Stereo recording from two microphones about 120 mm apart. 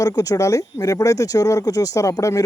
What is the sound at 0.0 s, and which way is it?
Speech, 30° left (ahead or behind).